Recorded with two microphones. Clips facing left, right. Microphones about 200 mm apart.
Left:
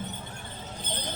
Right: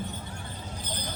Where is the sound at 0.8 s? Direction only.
25° left (ahead or behind).